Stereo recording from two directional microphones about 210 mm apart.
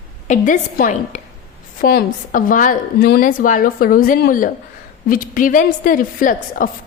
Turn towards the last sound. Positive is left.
turn(degrees=40)  # may be behind; listen again after turning